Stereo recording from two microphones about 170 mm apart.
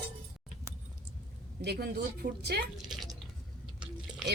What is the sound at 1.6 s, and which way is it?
Speech, 70° right (ahead or behind).